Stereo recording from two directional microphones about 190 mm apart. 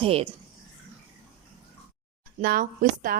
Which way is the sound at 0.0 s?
30° right (ahead or behind).